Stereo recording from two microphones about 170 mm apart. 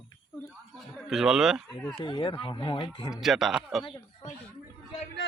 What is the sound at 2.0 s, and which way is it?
Speech, 30° left (ahead or behind).